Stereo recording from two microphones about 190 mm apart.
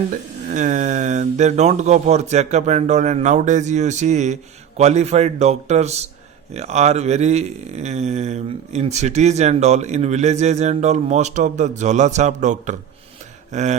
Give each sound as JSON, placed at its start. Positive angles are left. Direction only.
{"t": 0.1, "sound": "speech", "side_deg": -40}